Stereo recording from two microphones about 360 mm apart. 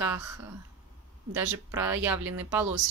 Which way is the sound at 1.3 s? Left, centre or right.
Centre.